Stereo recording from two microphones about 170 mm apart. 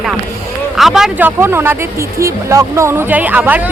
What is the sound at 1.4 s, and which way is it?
Speech, 15° right (ahead or behind).